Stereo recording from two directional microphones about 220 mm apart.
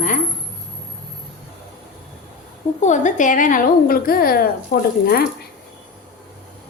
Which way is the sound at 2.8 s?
35° left (ahead or behind).